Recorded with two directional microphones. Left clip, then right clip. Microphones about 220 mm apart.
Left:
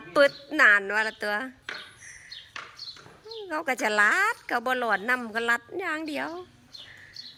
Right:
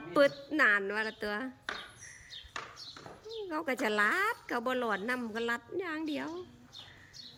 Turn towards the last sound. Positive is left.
turn(degrees=-5)  # may be behind; listen again after turning